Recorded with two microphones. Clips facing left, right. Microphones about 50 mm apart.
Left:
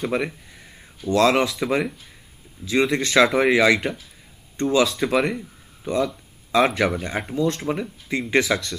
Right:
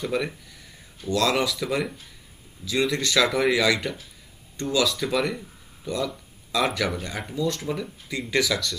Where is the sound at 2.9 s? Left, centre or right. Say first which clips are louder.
Left 6 dB; left.